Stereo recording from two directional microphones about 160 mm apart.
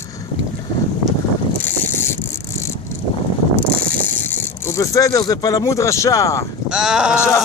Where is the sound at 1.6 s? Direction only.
15° left (ahead or behind).